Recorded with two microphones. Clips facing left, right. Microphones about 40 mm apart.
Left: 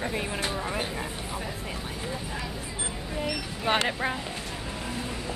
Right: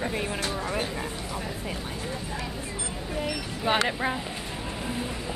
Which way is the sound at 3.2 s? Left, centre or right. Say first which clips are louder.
Even; centre.